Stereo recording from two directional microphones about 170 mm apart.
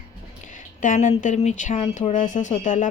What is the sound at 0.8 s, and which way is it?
Speech, 50° left (ahead or behind).